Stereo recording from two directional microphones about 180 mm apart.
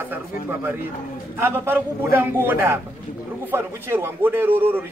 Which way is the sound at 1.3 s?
15° right (ahead or behind).